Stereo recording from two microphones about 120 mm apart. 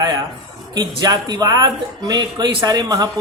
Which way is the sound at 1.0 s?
35° right (ahead or behind).